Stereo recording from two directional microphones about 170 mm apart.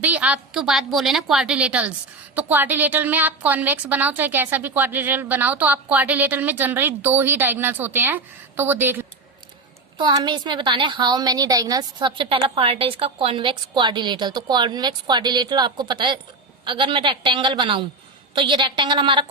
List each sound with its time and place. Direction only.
0.0 s a woman's voice: 10° right (ahead or behind)
10.0 s a woman's voice: 25° right (ahead or behind)